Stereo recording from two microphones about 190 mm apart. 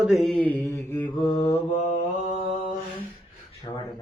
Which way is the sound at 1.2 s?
25° left (ahead or behind).